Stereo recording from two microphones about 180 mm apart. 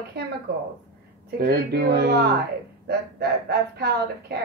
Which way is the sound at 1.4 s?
60° right (ahead or behind).